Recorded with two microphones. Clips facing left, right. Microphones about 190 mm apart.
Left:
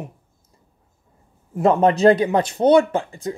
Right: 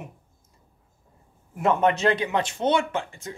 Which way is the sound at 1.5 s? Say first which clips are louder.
Left 5 dB; 35° left (ahead or behind).